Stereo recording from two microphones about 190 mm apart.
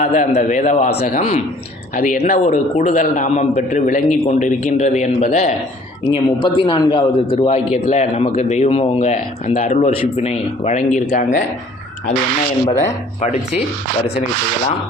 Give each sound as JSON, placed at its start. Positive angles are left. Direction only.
{"t": 0.0, "sound": "a man's voice", "side_deg": 40}
{"t": 6.1, "sound": "a man's voice", "side_deg": 25}
{"t": 12.6, "sound": "a man's voice", "side_deg": 40}